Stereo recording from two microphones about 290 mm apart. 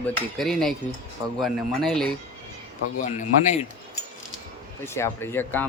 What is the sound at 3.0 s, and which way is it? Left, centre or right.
Speech, left.